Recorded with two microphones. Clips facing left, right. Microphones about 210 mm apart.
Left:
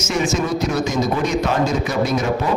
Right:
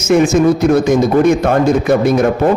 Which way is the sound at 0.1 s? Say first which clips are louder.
Right 10 dB; 55° right (ahead or behind).